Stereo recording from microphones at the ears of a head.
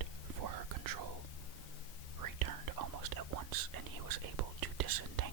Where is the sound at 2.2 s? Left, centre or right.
Right.